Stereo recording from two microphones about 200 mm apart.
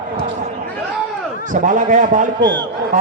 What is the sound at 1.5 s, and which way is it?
Speech, 40° right (ahead or behind).